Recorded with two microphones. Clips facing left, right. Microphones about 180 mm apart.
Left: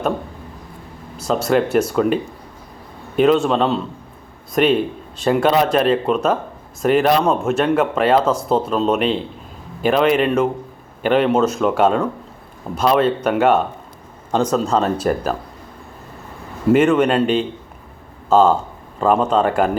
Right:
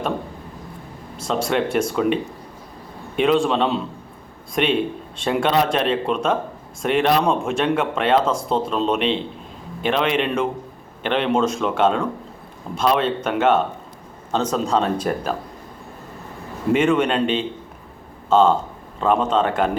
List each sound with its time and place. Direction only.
1.3 s speech: 5° left (ahead or behind)
3.2 s speech: 5° left (ahead or behind)
16.7 s speech: 5° left (ahead or behind)